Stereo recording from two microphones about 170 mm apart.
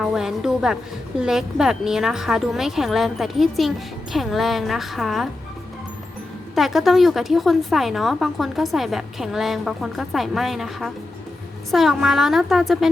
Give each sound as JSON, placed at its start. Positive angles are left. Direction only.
{"t": 0.0, "sound": "a woman's voice", "side_deg": 0}
{"t": 6.5, "sound": "a woman's voice", "side_deg": 0}